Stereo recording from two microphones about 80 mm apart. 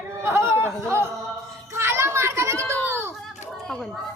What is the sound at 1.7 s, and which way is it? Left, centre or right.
Children playing, right.